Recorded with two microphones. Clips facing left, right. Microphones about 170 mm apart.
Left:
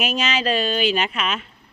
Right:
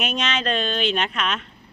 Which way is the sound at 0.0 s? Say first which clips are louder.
Left 2 dB; 5° left (ahead or behind).